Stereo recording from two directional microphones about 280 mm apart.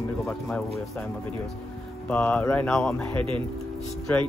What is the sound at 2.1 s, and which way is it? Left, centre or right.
Speech, centre.